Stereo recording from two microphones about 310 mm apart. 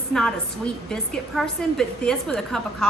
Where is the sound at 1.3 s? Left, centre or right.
Centre.